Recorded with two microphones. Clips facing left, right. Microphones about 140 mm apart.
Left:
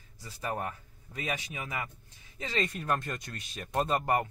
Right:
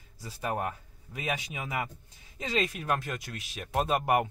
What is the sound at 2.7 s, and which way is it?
Speech, 5° right (ahead or behind).